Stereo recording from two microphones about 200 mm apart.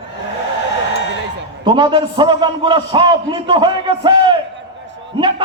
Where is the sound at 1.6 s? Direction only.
25° right (ahead or behind).